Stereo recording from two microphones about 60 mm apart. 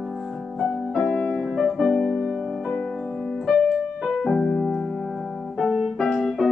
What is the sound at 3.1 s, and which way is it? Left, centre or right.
Keyboard, centre.